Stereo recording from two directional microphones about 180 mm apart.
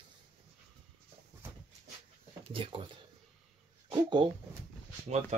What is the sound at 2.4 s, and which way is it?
Speech, 30° right (ahead or behind).